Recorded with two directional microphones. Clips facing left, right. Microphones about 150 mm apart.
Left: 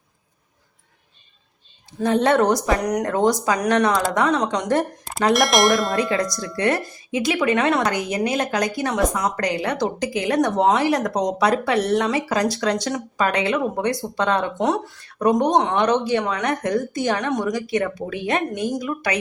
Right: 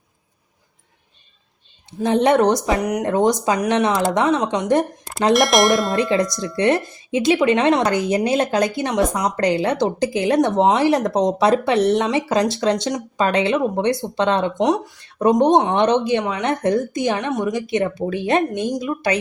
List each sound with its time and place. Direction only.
2.0 s a woman's voice: 20° right (ahead or behind)
5.3 s speech: centre (ahead or behind)
6.0 s speech: 25° right (ahead or behind)
16.4 s speech: 25° right (ahead or behind)